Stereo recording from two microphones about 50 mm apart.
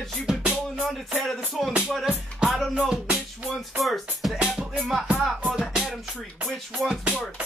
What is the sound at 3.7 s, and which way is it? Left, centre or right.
Speech, centre.